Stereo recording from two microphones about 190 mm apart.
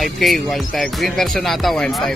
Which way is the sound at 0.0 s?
Centre (ahead or behind).